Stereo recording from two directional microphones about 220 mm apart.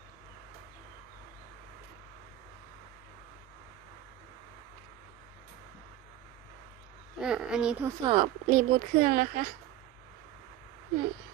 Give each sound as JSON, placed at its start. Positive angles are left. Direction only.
{"t": 7.2, "sound": "speech", "side_deg": -5}
{"t": 7.9, "sound": "speech", "side_deg": -25}